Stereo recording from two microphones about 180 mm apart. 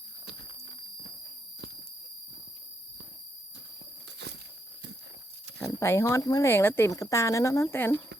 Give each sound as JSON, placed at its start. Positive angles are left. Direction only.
{"t": 5.8, "sound": "speech", "side_deg": 15}